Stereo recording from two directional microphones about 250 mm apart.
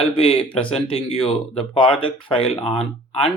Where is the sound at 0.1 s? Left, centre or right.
Left.